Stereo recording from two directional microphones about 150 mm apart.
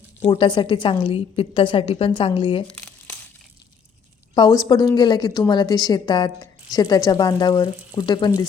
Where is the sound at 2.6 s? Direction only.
10° left (ahead or behind).